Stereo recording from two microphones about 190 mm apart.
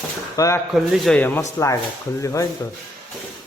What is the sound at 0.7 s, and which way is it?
A man's voice, centre (ahead or behind).